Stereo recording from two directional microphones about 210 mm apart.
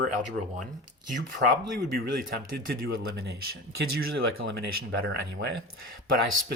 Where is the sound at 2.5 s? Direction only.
50° right (ahead or behind).